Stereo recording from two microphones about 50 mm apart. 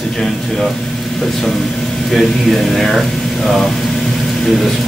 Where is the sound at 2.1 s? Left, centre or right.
Centre.